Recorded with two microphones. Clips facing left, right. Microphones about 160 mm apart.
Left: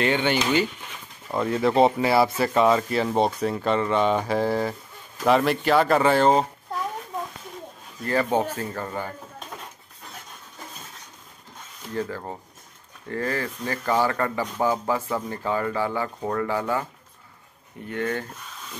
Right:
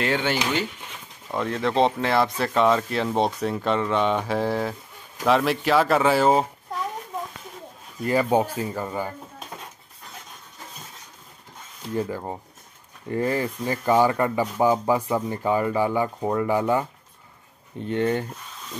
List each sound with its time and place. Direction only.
0.0 s speech: centre (ahead or behind)
8.0 s speech: 15° right (ahead or behind)
11.9 s speech: 15° right (ahead or behind)
17.8 s speech: 25° right (ahead or behind)